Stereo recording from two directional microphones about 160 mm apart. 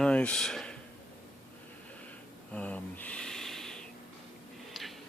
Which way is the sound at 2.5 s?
10° left (ahead or behind).